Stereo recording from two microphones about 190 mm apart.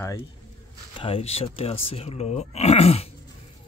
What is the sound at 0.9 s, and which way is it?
Speech, 30° left (ahead or behind).